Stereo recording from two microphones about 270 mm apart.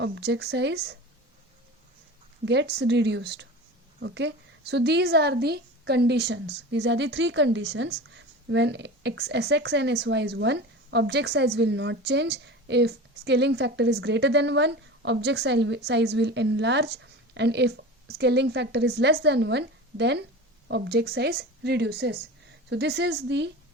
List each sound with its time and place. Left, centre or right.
0.0 s a woman's voice: right
2.4 s a woman's voice: right